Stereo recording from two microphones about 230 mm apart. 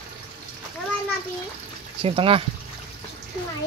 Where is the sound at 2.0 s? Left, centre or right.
Right.